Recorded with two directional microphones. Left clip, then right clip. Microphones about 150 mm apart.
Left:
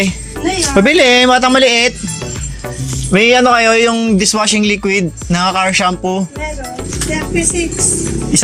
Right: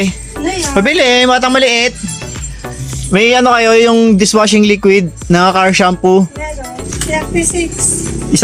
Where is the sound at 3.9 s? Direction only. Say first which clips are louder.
Right 5 dB; 35° right (ahead or behind).